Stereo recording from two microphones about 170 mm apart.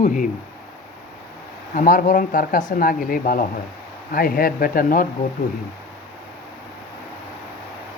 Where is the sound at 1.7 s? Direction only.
50° left (ahead or behind).